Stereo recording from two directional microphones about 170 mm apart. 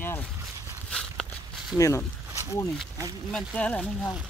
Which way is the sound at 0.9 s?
5° left (ahead or behind).